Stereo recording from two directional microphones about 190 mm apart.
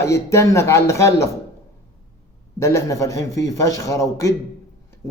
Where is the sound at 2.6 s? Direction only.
15° left (ahead or behind).